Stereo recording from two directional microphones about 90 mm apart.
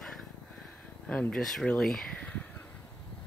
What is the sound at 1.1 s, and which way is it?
Speech, 10° left (ahead or behind).